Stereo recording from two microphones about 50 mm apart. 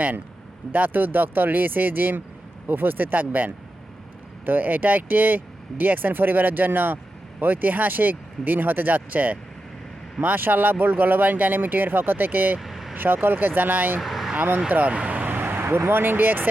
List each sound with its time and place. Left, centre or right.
0.7 s speech: right
12.5 s vehicle: centre
13.2 s speech: right
14.0 s vehicle: centre
14.8 s speech: right